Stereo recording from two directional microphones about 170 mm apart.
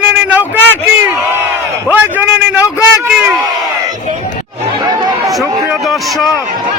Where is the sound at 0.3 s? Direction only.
10° right (ahead or behind).